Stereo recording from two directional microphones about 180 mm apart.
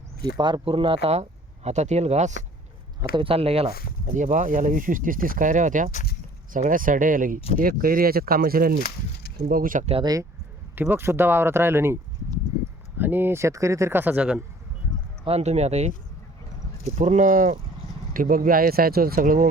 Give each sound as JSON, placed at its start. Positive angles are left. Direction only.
{"t": 0.3, "sound": "speech", "side_deg": -25}
{"t": 4.0, "sound": "speech", "side_deg": -45}
{"t": 5.9, "sound": "a sound", "side_deg": 45}
{"t": 6.5, "sound": "speech", "side_deg": -50}
{"t": 9.9, "sound": "speech", "side_deg": -20}
{"t": 10.8, "sound": "speech", "side_deg": -10}
{"t": 13.0, "sound": "speech", "side_deg": -10}
{"t": 15.2, "sound": "speech", "side_deg": -35}